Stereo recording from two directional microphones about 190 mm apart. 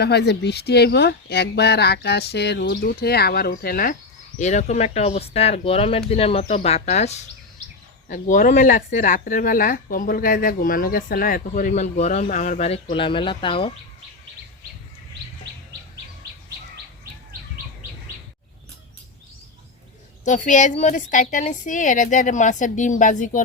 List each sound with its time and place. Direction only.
0.0 s speech: 60° left (ahead or behind)
4.4 s a woman's voice: 35° left (ahead or behind)
20.2 s a woman's voice: 40° left (ahead or behind)